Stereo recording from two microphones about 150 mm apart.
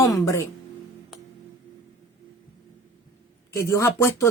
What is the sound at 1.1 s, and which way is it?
Tick-tock, centre (ahead or behind).